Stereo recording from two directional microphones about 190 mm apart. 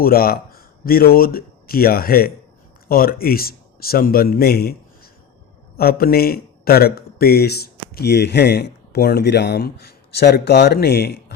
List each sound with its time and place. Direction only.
0.0 s a man's voice: 50° left (ahead or behind)